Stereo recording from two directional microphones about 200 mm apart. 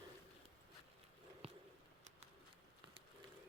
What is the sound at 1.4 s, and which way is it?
Bird, 30° right (ahead or behind).